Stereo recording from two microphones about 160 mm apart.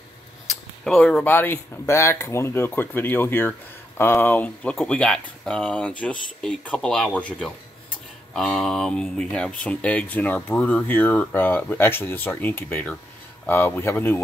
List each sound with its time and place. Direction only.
0.5 s speech: 5° left (ahead or behind)